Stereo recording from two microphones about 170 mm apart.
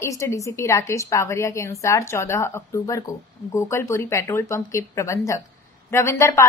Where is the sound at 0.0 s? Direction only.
15° left (ahead or behind).